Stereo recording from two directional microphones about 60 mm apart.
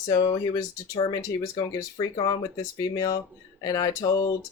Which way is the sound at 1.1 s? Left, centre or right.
Left.